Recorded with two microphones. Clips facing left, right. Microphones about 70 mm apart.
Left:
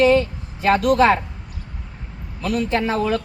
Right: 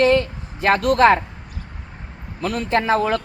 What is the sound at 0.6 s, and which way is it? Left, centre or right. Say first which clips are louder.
Speech: right 1 dB; right.